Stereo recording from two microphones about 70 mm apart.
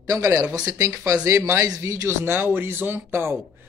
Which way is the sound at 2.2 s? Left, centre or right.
Right.